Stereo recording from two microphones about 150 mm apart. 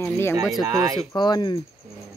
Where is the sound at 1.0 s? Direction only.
30° left (ahead or behind).